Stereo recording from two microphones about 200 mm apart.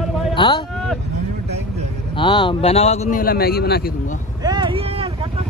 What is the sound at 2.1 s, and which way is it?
A man's voice, 25° left (ahead or behind).